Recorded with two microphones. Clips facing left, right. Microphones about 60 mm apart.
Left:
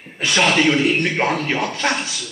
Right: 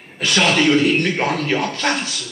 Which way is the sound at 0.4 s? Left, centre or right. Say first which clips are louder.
Right 1 dB; centre.